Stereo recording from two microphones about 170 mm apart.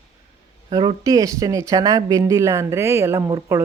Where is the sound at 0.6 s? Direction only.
30° right (ahead or behind).